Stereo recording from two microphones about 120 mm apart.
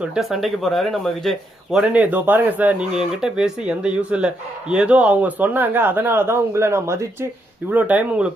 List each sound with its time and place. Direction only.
0.0 s speech: 5° right (ahead or behind)
1.8 s a man's voice: 10° right (ahead or behind)
7.7 s speech: 15° right (ahead or behind)